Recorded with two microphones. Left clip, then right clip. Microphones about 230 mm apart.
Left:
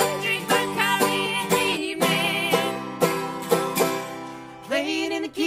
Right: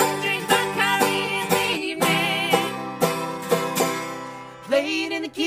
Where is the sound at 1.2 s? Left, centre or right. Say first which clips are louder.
Even; left.